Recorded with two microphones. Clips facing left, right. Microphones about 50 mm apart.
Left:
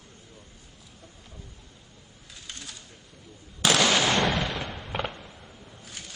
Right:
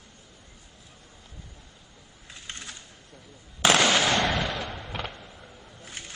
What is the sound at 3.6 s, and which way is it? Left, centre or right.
Fireworks, right.